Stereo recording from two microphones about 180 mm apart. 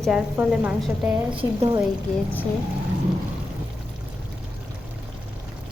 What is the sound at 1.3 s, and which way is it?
Speech, 25° right (ahead or behind).